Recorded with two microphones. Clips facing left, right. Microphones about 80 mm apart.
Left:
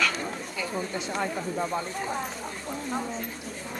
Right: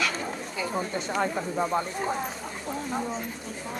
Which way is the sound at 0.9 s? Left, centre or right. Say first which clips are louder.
Right 2 dB; right.